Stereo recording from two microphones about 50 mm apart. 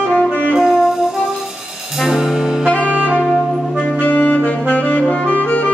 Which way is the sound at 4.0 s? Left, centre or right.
Left.